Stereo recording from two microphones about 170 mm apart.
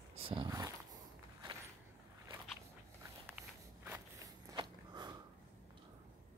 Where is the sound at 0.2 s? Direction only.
30° right (ahead or behind).